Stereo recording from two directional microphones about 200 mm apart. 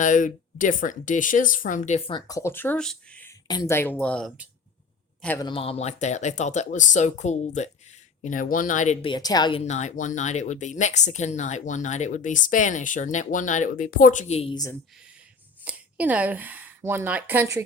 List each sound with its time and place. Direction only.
0.0 s speech: 40° left (ahead or behind); by 3.3 s 5° left (ahead or behind)
3.4 s speech: 20° left (ahead or behind)
5.4 s speech: 25° left (ahead or behind)
15.6 s speech: 5° right (ahead or behind)